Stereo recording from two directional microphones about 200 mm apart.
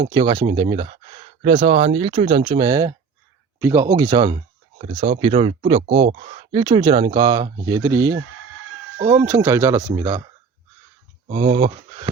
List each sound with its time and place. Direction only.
0.1 s speech: 25° right (ahead or behind)
4.8 s speech: 35° right (ahead or behind); by 10.2 s 15° right (ahead or behind)
11.3 s speech: 35° right (ahead or behind)